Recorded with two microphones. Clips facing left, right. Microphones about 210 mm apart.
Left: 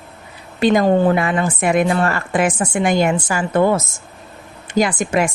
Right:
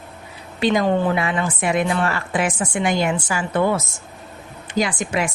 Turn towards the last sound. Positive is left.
turn(degrees=45)  # may be behind; listen again after turning